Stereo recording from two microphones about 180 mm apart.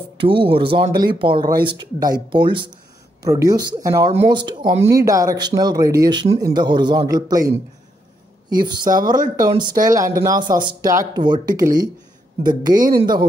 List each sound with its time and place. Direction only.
0.3 s speech: 30° right (ahead or behind)